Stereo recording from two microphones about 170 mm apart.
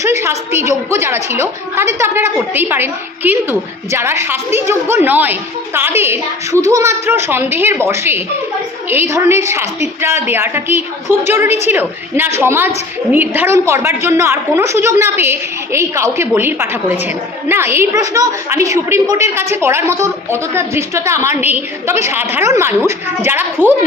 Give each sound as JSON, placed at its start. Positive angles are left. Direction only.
{"t": 0.0, "sound": "a woman's voice", "side_deg": -15}